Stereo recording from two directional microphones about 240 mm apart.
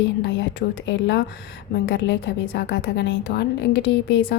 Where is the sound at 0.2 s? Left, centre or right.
Left.